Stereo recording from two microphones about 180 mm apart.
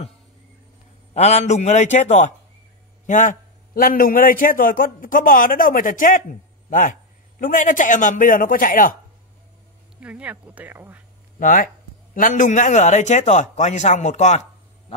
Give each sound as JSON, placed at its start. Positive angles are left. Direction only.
{"t": 1.1, "sound": "a man's voice", "side_deg": 40}
{"t": 9.9, "sound": "speech", "side_deg": -10}
{"t": 11.3, "sound": "a man's voice", "side_deg": 50}